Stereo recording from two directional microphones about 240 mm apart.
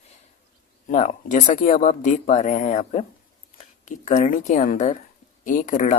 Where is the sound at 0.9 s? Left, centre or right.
Left.